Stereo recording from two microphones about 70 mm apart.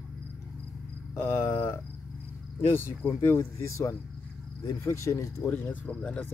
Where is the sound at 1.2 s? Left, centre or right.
Left.